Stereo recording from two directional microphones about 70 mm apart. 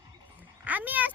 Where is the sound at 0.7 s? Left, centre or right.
Right.